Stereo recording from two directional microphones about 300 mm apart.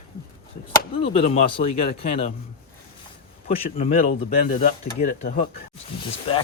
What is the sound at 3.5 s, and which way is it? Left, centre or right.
Speech, centre.